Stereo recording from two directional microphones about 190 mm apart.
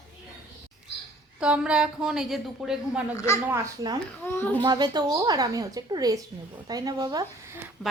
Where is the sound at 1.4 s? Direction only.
5° right (ahead or behind).